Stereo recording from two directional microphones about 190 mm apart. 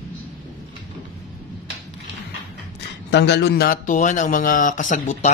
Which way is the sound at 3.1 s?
65° left (ahead or behind).